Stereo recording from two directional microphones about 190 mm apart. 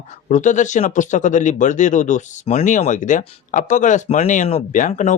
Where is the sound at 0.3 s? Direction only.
40° left (ahead or behind).